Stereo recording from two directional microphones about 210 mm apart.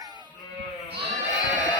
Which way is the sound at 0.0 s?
20° right (ahead or behind).